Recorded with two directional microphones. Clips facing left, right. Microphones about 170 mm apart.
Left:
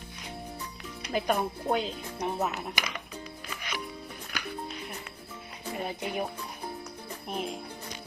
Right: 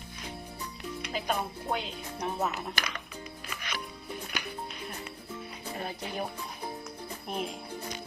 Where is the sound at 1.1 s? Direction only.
45° left (ahead or behind).